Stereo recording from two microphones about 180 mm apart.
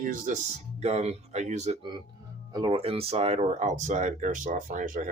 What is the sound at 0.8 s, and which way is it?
Speech, 35° right (ahead or behind).